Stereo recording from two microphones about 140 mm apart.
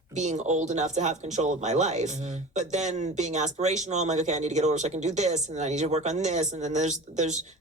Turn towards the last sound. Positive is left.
turn(degrees=-55)  # may be behind; listen again after turning